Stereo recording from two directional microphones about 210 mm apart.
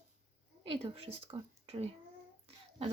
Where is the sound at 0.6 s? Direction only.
25° right (ahead or behind).